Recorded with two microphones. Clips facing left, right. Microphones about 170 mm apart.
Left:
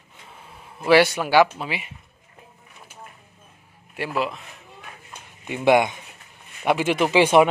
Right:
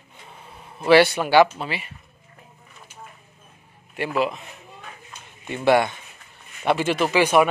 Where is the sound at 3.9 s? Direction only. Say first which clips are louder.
Right 2 dB; centre (ahead or behind).